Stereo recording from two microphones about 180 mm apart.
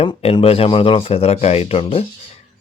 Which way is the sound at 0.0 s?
30° left (ahead or behind).